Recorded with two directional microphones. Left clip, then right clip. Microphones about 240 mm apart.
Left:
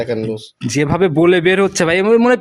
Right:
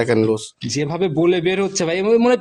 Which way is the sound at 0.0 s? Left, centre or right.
Right.